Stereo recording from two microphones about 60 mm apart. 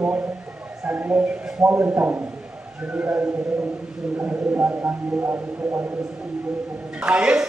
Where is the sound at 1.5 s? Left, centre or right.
Centre.